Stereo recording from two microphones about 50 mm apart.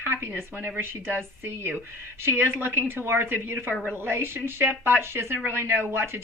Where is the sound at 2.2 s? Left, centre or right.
Right.